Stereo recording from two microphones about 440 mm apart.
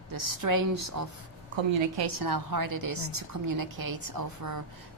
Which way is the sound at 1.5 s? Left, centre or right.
Right.